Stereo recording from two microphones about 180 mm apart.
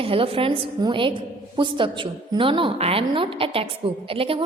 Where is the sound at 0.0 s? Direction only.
30° right (ahead or behind).